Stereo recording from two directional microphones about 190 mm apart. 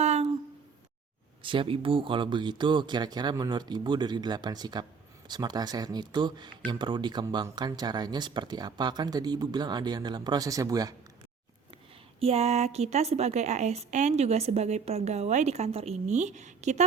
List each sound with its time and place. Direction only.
0.0 s a sound: 35° right (ahead or behind)
1.4 s speech: 25° right (ahead or behind)
12.2 s a woman's voice: 35° right (ahead or behind)